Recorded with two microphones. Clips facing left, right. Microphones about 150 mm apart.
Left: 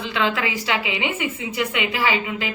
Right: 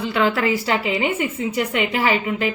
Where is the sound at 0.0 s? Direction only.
35° right (ahead or behind).